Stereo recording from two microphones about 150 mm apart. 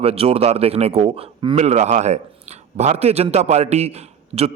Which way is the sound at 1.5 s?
50° right (ahead or behind).